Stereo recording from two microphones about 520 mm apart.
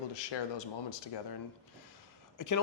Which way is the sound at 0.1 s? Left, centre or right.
Left.